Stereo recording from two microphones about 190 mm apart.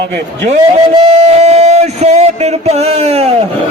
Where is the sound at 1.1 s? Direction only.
35° right (ahead or behind).